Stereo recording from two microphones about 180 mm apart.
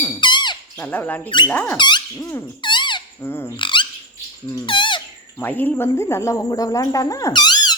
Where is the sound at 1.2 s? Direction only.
25° left (ahead or behind).